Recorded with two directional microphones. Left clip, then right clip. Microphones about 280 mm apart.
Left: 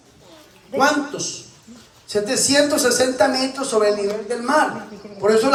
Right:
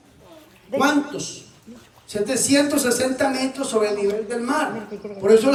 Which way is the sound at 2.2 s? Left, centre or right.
Left.